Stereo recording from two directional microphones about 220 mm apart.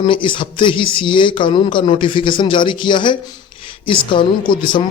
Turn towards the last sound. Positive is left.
turn(degrees=20)  # may be behind; listen again after turning